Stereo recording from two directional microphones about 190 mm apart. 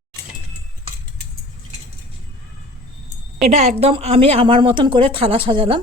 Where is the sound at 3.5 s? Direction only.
35° right (ahead or behind).